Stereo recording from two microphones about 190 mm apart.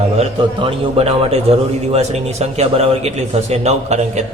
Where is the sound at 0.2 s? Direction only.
30° right (ahead or behind).